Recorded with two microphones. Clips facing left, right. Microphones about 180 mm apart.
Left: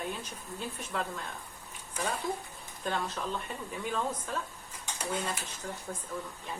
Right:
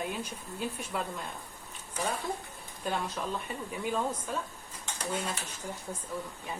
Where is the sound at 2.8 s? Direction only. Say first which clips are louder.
Even; 5° right (ahead or behind).